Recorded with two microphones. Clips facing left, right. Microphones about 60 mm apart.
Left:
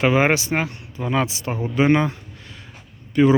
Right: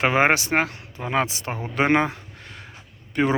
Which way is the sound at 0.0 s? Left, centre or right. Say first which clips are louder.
Left 1 dB; right.